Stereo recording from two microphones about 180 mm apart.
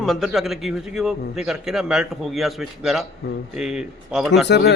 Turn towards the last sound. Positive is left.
turn(degrees=65)  # may be behind; listen again after turning